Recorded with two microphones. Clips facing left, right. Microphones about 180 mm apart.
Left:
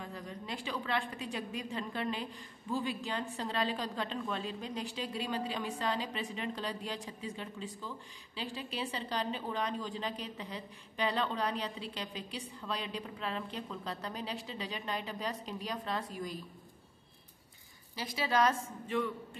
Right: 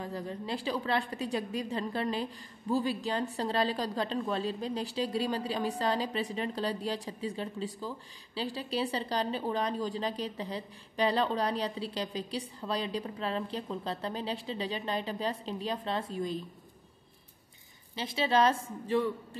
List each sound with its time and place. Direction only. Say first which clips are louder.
0.0 s a woman's voice: right 6 dB; 35° right (ahead or behind)
17.9 s a woman's voice: right 4 dB; 25° right (ahead or behind)